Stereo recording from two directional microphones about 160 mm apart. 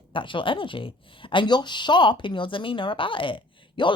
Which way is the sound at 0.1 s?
30° left (ahead or behind).